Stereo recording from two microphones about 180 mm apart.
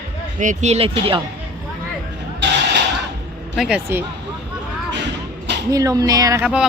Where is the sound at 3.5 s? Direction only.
Centre (ahead or behind).